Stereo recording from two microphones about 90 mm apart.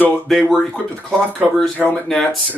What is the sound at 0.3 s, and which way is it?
Speech, centre (ahead or behind).